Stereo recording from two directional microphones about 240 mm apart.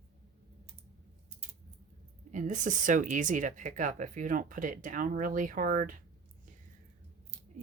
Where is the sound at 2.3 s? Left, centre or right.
Right.